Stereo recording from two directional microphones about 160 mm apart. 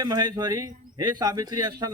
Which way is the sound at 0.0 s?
25° right (ahead or behind).